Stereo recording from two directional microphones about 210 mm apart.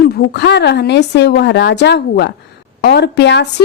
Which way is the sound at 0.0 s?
50° left (ahead or behind).